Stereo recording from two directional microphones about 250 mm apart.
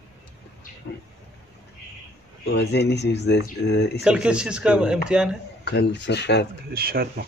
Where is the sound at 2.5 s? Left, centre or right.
Left.